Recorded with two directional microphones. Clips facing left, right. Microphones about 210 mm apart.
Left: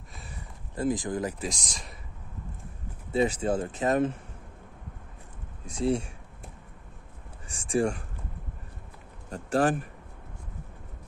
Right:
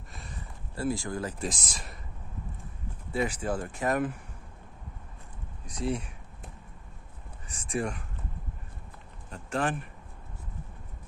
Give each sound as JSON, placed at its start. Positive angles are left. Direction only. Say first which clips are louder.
{"t": 0.1, "sound": "a sound", "louder": "even", "side_deg": 5}
{"t": 0.7, "sound": "speech", "louder": "left 3 dB", "side_deg": 20}
{"t": 1.4, "sound": "speech", "louder": "even", "side_deg": -5}
{"t": 3.1, "sound": "speech", "louder": "left 5 dB", "side_deg": 25}
{"t": 5.7, "sound": "speech", "louder": "left 5 dB", "side_deg": 30}
{"t": 7.4, "sound": "speech", "louder": "left 6 dB", "side_deg": 30}
{"t": 9.3, "sound": "speech", "louder": "left 6 dB", "side_deg": 40}